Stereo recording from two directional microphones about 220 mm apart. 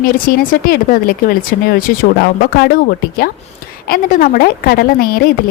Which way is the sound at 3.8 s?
40° left (ahead or behind).